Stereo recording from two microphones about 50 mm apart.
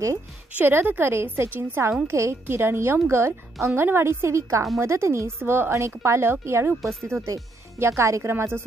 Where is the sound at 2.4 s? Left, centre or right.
Right.